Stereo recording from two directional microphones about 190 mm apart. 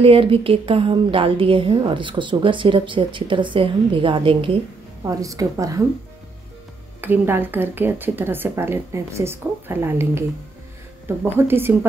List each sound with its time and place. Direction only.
0.0 s a woman's voice: 30° right (ahead or behind)
7.0 s speech: 10° right (ahead or behind)